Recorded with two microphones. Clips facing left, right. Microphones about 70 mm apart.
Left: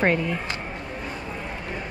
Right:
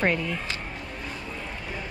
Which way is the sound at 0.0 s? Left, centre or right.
Left.